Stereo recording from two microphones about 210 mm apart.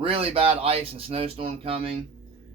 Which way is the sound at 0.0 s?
25° right (ahead or behind).